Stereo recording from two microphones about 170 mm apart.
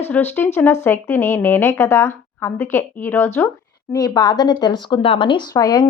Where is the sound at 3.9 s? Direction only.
25° left (ahead or behind).